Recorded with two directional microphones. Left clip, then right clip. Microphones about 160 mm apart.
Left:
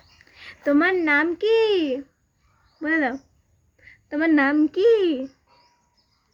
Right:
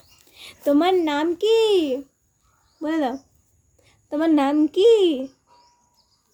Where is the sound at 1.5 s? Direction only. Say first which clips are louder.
Right 2 dB; 15° left (ahead or behind).